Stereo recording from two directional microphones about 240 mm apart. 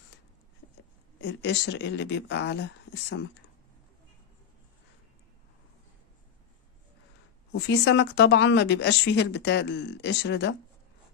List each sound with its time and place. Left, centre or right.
1.2 s a woman's voice: left
7.5 s a woman's voice: left